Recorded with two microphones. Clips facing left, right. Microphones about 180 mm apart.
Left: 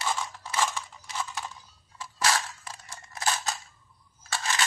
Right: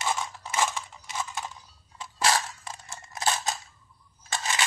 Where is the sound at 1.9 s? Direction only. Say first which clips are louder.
Right 2 dB; 25° right (ahead or behind).